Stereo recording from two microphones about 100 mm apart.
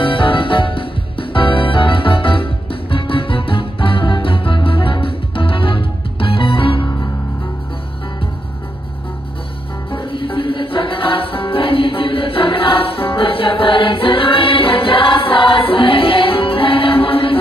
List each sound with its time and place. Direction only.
0.0 s music: 60° left (ahead or behind)
9.9 s music: 60° left (ahead or behind)